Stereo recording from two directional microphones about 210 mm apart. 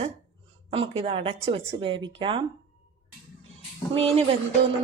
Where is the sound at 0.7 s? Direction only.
25° right (ahead or behind).